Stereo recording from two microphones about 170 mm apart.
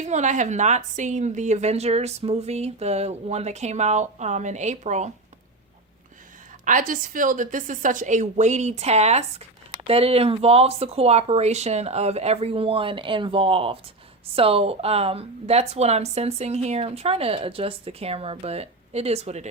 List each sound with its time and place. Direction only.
0.0 s a woman's voice: 45° right (ahead or behind)
6.7 s a woman's voice: 50° right (ahead or behind)